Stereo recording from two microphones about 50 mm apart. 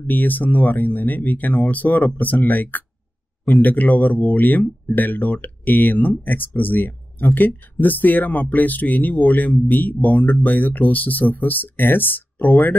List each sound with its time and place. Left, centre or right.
0.0 s speech: left